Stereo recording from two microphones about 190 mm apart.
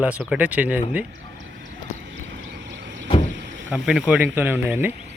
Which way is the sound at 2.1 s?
70° right (ahead or behind).